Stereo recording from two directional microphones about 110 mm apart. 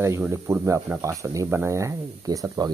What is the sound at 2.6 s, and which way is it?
Speech, 40° right (ahead or behind).